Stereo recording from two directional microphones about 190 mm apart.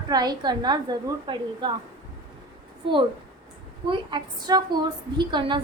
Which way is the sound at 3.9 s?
20° right (ahead or behind).